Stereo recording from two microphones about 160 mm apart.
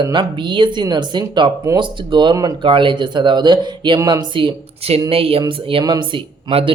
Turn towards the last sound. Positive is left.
turn(degrees=-35)  # may be behind; listen again after turning